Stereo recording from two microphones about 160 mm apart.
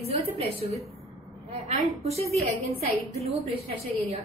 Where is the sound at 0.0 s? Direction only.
40° right (ahead or behind).